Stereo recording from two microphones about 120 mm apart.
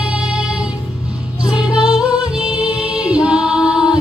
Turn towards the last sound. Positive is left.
turn(degrees=-5)  # may be behind; listen again after turning